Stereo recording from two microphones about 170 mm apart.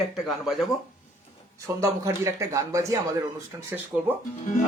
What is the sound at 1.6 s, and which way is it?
Speech, 20° right (ahead or behind).